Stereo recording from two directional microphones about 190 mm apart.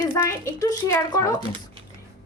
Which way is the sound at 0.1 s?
20° left (ahead or behind).